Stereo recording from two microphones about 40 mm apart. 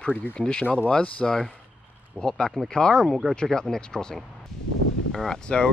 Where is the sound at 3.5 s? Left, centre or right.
Centre.